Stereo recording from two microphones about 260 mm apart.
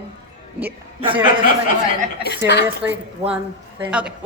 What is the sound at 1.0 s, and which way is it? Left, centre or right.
Speech, centre.